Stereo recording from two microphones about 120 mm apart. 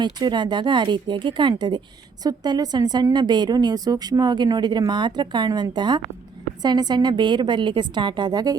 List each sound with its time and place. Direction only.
0.0 s a woman's voice: 40° right (ahead or behind)